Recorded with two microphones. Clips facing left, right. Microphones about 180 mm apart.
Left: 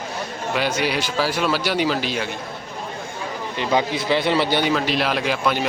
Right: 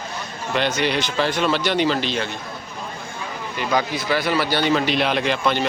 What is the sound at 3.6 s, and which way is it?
A man's voice, 25° left (ahead or behind).